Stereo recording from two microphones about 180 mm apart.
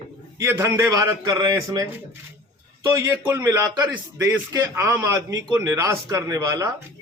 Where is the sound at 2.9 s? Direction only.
20° right (ahead or behind).